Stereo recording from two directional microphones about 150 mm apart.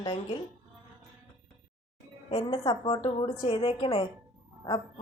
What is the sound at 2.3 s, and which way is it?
A woman's voice, 30° left (ahead or behind).